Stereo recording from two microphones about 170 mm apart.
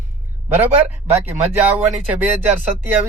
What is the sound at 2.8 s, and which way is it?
Speech, 10° right (ahead or behind).